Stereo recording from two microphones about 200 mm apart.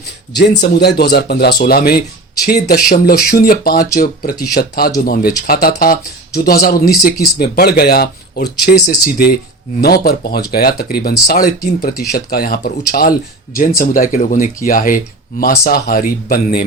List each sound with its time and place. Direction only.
0.3 s speech: 55° left (ahead or behind)